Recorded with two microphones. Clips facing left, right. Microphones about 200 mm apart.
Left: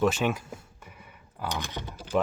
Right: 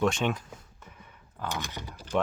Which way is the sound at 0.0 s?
5° left (ahead or behind).